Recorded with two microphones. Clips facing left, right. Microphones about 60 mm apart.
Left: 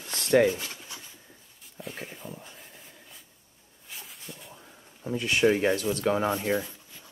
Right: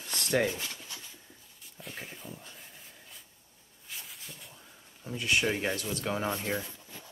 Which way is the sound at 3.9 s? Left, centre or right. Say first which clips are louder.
Left 2 dB; centre.